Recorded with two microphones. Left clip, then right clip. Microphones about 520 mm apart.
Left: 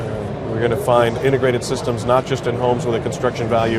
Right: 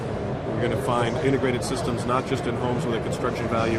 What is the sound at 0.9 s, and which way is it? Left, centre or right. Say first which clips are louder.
Speech: left 9 dB; left.